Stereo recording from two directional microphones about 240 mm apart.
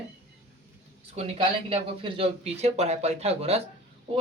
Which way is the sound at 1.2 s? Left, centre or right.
Right.